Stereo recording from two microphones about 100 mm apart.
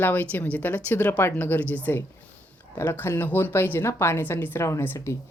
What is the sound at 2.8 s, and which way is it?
A woman's voice, 25° left (ahead or behind).